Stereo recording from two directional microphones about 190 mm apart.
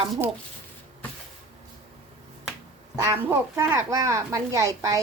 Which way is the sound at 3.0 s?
15° right (ahead or behind).